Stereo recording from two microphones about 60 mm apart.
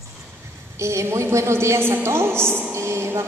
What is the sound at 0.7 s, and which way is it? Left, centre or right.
A woman's voice, right.